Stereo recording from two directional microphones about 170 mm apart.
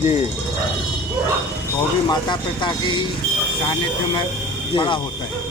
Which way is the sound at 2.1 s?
25° left (ahead or behind).